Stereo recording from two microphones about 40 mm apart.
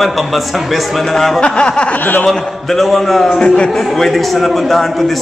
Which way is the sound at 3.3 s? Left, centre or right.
Left.